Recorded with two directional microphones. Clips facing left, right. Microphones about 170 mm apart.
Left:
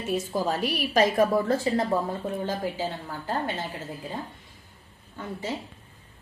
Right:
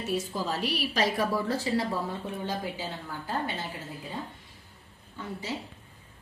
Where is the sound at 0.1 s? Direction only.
50° left (ahead or behind).